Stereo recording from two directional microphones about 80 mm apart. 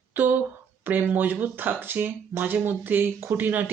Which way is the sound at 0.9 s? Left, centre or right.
Right.